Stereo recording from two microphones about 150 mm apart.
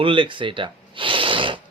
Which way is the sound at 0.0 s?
35° right (ahead or behind).